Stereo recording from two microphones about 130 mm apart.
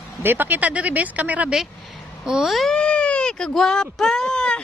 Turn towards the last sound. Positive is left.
turn(degrees=5)  # may be behind; listen again after turning